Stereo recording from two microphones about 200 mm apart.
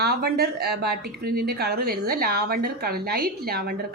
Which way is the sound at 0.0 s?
50° right (ahead or behind).